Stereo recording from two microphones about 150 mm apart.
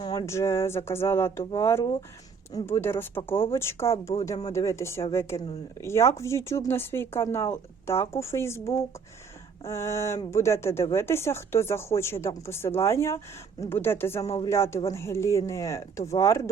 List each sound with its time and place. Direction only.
0.0 s speech: 25° left (ahead or behind)